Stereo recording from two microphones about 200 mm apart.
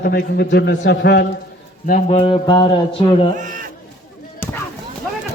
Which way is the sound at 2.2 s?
25° left (ahead or behind).